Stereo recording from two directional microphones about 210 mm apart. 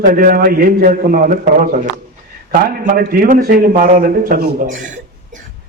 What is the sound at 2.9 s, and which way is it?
A man's voice, 45° right (ahead or behind).